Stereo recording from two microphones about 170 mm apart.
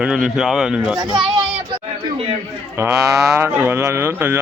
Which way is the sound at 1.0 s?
25° right (ahead or behind).